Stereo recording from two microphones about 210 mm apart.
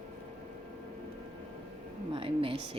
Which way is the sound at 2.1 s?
25° right (ahead or behind).